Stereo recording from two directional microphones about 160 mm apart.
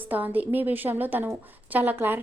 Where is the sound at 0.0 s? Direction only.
10° right (ahead or behind).